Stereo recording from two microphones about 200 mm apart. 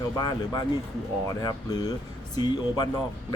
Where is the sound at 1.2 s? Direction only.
20° left (ahead or behind).